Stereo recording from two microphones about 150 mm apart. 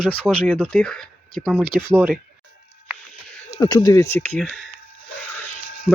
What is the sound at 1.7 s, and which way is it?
Speech, 30° left (ahead or behind).